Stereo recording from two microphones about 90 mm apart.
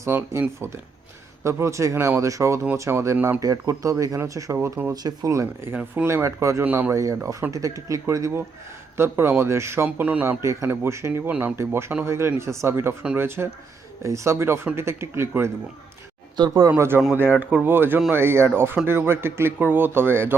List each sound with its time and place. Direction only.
0.0 s speech: 25° right (ahead or behind)
3.2 s speech: 20° right (ahead or behind)
3.4 s speech: 40° right (ahead or behind)
5.7 s speech: 20° right (ahead or behind)
6.1 s speech: 35° right (ahead or behind)
6.7 s speech: 20° right (ahead or behind)
6.9 s speech: 35° right (ahead or behind)
9.0 s speech: 25° right (ahead or behind)
10.2 s speech: 35° right (ahead or behind)
11.3 s speech: 20° right (ahead or behind)
11.5 s speech: 30° right (ahead or behind)
16.6 s speech: 30° right (ahead or behind)
17.2 s speech: 20° right (ahead or behind)